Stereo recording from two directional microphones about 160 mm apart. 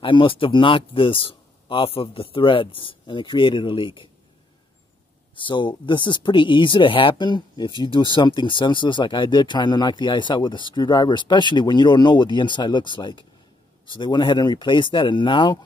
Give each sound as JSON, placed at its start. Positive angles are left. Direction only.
{"t": 0.0, "sound": "speech", "side_deg": 30}
{"t": 5.3, "sound": "speech", "side_deg": 30}